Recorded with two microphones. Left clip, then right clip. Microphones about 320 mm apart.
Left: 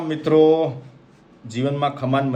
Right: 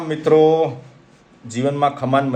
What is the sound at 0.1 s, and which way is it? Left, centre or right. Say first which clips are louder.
A man's voice: right 2 dB; centre.